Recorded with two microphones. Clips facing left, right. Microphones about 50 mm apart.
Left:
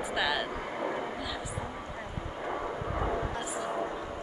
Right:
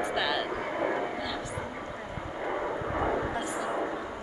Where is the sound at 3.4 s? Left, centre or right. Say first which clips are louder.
Right 2 dB; centre.